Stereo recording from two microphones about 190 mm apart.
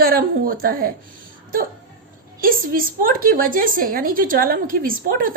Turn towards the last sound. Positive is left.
turn(degrees=-50)  # may be behind; listen again after turning